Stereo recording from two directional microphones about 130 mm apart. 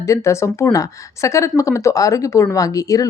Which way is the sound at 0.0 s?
25° left (ahead or behind).